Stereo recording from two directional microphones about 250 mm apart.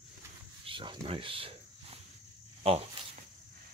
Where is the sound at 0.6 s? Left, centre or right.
Centre.